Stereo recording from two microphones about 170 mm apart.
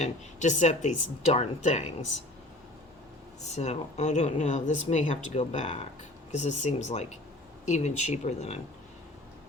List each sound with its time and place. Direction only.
0.0 s speech: 45° left (ahead or behind)
3.5 s speech: 40° left (ahead or behind)